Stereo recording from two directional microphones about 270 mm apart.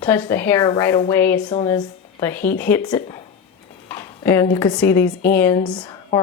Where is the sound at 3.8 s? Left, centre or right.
Centre.